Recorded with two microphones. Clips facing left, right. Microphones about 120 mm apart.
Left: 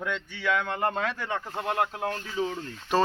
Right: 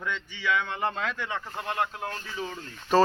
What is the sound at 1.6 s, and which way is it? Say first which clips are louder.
Speech: left 2 dB; 55° left (ahead or behind).